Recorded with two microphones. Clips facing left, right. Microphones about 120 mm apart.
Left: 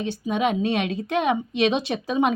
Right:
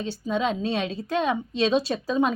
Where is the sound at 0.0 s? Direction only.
15° left (ahead or behind).